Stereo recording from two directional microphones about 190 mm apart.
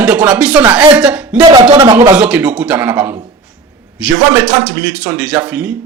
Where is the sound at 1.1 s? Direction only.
5° right (ahead or behind).